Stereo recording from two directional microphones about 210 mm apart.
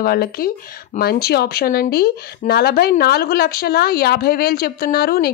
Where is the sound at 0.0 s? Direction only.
45° left (ahead or behind).